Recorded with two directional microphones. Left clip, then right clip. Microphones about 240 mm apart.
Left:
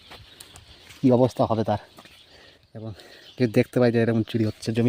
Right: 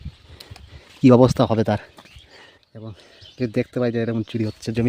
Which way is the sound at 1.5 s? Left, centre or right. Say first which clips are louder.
Right 3 dB; right.